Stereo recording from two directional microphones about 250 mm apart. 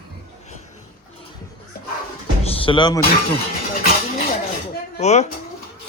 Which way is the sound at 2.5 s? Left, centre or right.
Centre.